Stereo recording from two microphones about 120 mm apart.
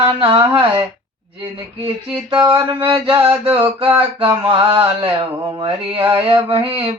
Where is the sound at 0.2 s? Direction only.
45° right (ahead or behind).